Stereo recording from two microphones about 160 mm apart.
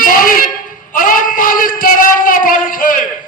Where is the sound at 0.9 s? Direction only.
60° left (ahead or behind).